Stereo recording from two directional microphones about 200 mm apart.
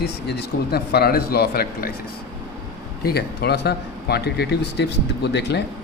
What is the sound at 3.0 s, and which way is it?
Speech, 50° left (ahead or behind).